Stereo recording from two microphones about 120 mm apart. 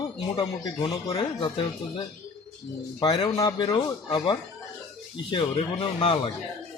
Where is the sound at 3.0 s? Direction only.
35° left (ahead or behind).